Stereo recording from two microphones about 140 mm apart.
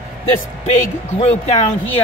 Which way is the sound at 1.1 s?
45° left (ahead or behind).